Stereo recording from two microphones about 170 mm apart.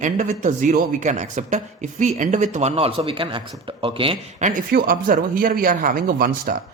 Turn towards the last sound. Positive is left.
turn(degrees=-55)  # may be behind; listen again after turning